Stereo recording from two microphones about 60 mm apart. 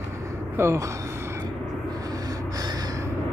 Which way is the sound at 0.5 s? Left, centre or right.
Right.